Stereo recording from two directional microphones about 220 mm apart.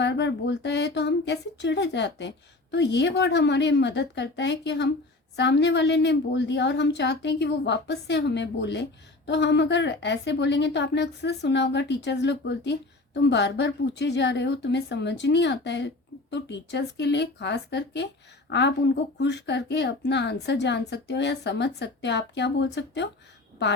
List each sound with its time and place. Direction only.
0.0 s a woman's voice: 50° left (ahead or behind)